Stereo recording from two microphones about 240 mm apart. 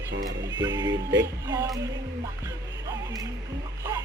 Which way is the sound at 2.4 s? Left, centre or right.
Centre.